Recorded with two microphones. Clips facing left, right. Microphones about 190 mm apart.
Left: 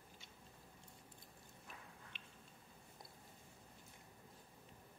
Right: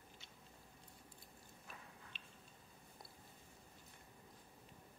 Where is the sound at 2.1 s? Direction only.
20° left (ahead or behind).